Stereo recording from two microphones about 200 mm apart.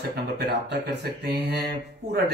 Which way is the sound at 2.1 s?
55° right (ahead or behind).